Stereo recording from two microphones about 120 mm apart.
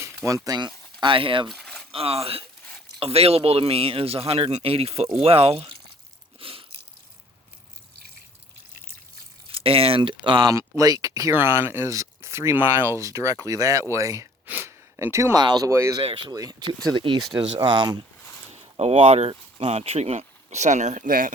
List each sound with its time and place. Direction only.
0.3 s speech: 30° right (ahead or behind)
1.0 s speech: 45° right (ahead or behind)
1.5 s a sound: centre (ahead or behind)
1.9 s speech: 55° right (ahead or behind)
6.4 s a sound: 50° right (ahead or behind)
9.5 s speech: 50° right (ahead or behind)
10.5 s speech: 25° right (ahead or behind)
14.4 s gasp: 15° right (ahead or behind)
15.4 s speech: 35° right (ahead or behind)
15.7 s speech: 25° right (ahead or behind)
16.0 s speech: 45° right (ahead or behind)
16.3 s speech: 30° right (ahead or behind)
18.5 s speech: 60° right (ahead or behind); by 21.3 s 90° right